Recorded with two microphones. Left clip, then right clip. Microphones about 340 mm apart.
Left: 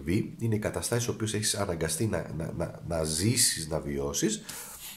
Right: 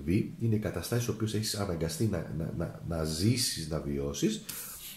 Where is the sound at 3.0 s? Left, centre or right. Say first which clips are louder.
Left 2 dB; left.